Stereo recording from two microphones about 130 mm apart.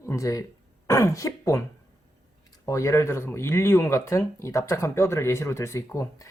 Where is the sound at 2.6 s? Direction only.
25° left (ahead or behind).